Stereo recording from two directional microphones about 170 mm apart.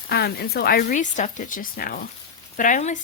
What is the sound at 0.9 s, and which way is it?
Speech, 45° left (ahead or behind).